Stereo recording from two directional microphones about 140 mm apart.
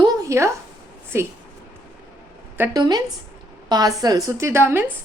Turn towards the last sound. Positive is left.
turn(degrees=-15)  # may be behind; listen again after turning